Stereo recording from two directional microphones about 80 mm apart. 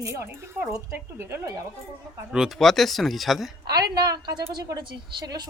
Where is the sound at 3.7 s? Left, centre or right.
Right.